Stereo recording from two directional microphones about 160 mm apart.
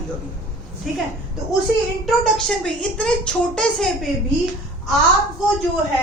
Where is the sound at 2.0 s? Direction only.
Centre (ahead or behind).